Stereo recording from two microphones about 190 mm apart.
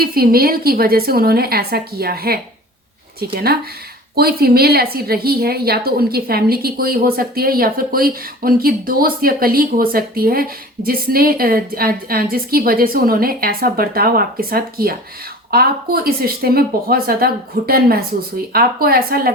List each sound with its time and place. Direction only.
0.0 s a woman's voice: 50° right (ahead or behind)